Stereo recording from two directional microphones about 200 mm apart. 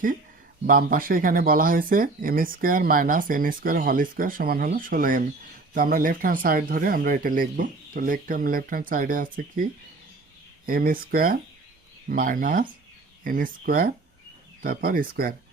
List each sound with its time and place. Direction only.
0.7 s speech: 45° right (ahead or behind)
10.7 s speech: 45° right (ahead or behind)